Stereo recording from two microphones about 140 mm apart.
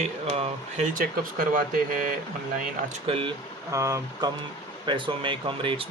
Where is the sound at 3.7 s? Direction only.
20° right (ahead or behind).